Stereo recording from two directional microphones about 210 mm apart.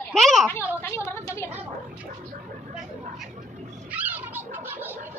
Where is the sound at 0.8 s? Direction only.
10° left (ahead or behind).